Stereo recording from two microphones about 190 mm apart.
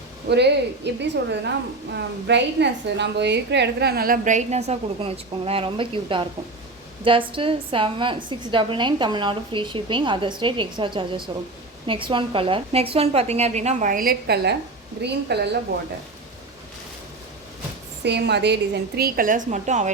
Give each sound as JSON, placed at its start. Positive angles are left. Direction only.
{"t": 0.3, "sound": "a woman's voice", "side_deg": -60}
{"t": 18.0, "sound": "a woman's voice", "side_deg": -65}